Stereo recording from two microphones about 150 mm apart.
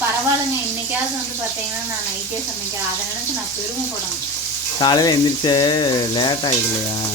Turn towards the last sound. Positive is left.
turn(degrees=30)  # may be behind; listen again after turning